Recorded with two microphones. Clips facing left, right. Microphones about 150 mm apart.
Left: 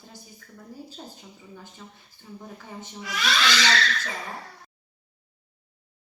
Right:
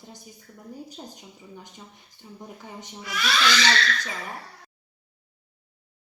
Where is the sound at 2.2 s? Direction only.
15° right (ahead or behind).